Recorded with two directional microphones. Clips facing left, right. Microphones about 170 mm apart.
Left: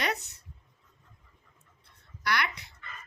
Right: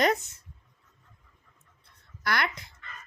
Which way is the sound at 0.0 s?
45° right (ahead or behind).